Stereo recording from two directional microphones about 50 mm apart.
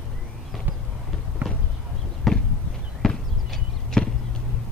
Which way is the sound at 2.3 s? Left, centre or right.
Centre.